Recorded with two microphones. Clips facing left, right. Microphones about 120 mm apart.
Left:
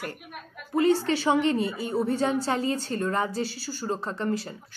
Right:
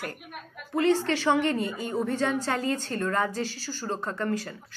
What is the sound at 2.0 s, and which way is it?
Speech, 35° left (ahead or behind).